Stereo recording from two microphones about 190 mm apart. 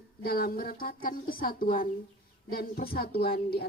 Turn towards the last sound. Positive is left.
turn(degrees=55)  # may be behind; listen again after turning